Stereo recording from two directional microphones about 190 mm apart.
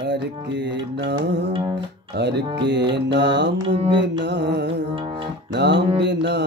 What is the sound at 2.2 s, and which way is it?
Music, 65° right (ahead or behind).